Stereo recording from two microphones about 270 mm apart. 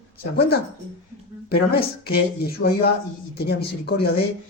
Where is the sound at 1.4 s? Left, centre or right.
Left.